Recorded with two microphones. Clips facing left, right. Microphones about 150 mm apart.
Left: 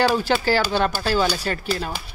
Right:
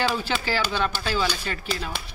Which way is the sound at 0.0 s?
40° left (ahead or behind).